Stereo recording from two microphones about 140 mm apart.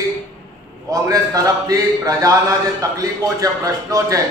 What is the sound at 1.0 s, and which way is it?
A man's voice, 25° right (ahead or behind).